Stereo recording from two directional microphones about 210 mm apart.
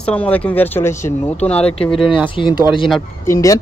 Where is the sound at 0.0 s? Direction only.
5° left (ahead or behind).